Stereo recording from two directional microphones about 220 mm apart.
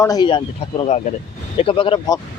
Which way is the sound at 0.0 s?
20° left (ahead or behind).